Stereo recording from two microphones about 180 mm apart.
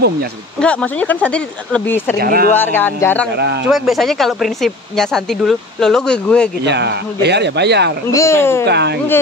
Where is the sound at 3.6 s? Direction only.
Centre (ahead or behind).